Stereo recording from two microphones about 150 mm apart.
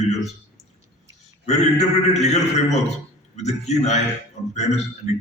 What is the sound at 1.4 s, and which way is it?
A man's voice, 50° left (ahead or behind).